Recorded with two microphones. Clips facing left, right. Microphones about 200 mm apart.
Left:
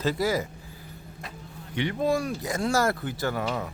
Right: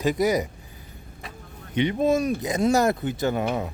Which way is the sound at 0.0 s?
15° right (ahead or behind).